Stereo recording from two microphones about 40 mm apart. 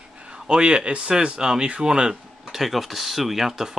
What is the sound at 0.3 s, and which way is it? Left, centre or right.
Speech, right.